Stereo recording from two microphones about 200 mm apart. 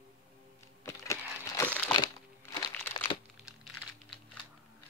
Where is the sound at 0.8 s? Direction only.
15° left (ahead or behind).